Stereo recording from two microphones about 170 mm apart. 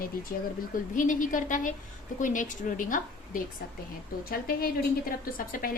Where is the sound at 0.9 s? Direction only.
50° left (ahead or behind).